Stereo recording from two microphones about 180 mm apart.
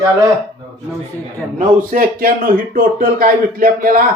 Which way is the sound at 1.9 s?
55° right (ahead or behind).